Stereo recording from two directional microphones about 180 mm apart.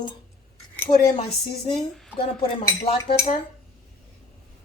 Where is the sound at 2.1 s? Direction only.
30° left (ahead or behind).